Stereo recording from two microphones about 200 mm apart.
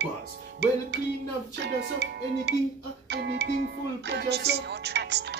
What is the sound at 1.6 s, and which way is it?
Music, 60° right (ahead or behind).